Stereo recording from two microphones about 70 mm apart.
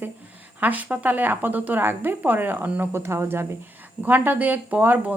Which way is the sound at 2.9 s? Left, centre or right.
Right.